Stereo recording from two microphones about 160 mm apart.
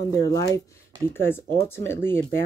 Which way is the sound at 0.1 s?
20° left (ahead or behind).